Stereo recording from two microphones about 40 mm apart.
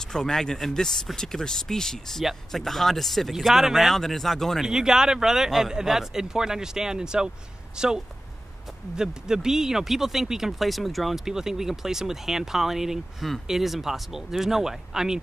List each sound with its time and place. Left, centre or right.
0.0 s speech: centre
3.9 s speech: centre
4.6 s speech: centre
10.6 s speech: centre
11.2 s speech: centre